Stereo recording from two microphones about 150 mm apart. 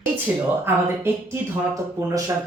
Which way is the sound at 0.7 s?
15° right (ahead or behind).